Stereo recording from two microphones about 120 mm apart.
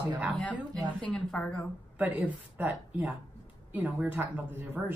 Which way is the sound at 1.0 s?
5° left (ahead or behind).